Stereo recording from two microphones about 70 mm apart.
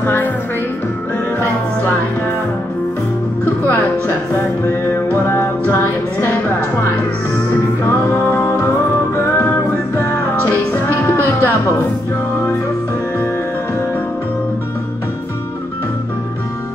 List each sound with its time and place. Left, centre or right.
0.0 s music: left
5.1 s music: left
7.8 s music: left